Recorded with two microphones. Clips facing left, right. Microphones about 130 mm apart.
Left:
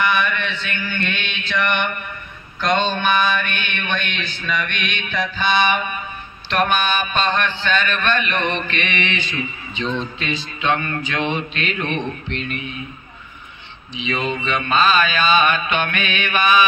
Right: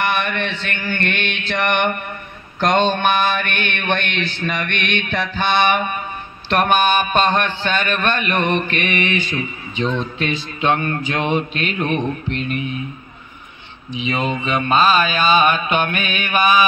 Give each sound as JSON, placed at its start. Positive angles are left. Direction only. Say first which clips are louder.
{"t": 0.0, "sound": "mantra", "louder": "even", "side_deg": -60}
{"t": 6.5, "sound": "a man's voice", "louder": "right 3 dB", "side_deg": -50}
{"t": 14.4, "sound": "mantra", "louder": "right 2 dB", "side_deg": -40}